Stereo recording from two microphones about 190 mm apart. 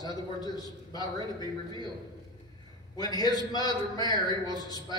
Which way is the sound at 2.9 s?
20° left (ahead or behind).